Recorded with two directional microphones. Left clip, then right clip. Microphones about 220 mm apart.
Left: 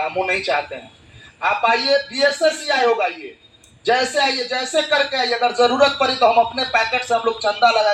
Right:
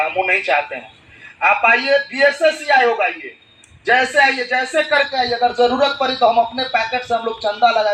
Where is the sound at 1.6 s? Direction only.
40° left (ahead or behind).